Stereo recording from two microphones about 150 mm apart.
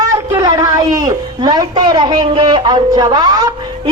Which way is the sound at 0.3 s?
20° right (ahead or behind).